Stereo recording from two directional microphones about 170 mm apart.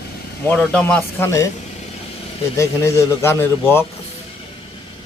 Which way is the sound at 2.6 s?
20° left (ahead or behind).